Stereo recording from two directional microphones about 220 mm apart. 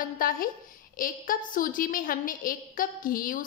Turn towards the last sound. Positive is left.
turn(degrees=40)  # may be behind; listen again after turning